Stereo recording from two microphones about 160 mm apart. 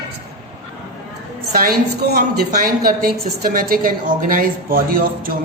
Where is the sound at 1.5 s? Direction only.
70° right (ahead or behind).